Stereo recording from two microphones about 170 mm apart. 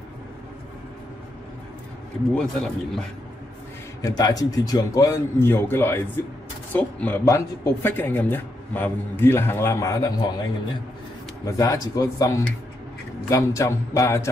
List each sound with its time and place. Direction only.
2.3 s a man's voice: 5° left (ahead or behind)
4.0 s a man's voice: 20° left (ahead or behind)
11.4 s a man's voice: 20° left (ahead or behind)